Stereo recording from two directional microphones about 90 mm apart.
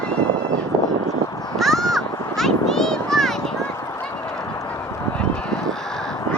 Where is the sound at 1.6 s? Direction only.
Centre (ahead or behind).